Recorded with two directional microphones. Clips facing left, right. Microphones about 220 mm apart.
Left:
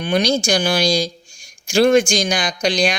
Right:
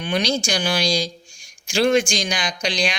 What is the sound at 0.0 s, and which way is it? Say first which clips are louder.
Speech: left 4 dB; 45° left (ahead or behind).